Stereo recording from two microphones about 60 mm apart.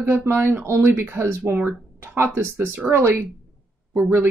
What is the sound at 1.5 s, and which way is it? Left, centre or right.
Speech, right.